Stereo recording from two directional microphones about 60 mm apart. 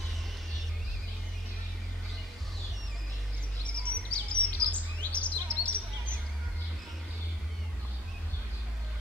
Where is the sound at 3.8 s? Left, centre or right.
Left.